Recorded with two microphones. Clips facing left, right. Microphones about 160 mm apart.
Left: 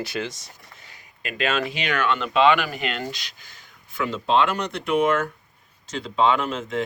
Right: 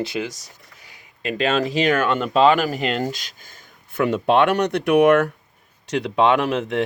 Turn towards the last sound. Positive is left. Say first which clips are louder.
# right 5 dB
turn(degrees=-65)  # may be behind; listen again after turning